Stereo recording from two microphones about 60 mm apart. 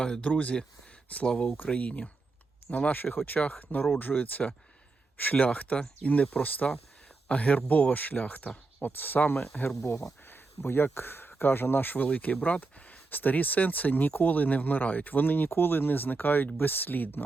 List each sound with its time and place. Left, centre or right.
0.2 s speech: left
10.2 s speech: left